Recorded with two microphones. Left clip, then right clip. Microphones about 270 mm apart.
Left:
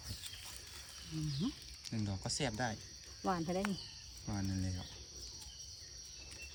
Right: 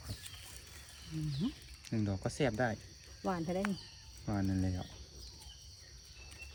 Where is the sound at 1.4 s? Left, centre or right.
Centre.